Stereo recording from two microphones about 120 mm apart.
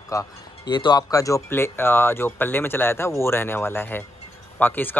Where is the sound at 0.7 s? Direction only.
40° left (ahead or behind).